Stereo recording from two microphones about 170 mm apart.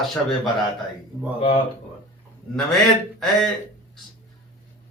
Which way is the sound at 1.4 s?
35° left (ahead or behind).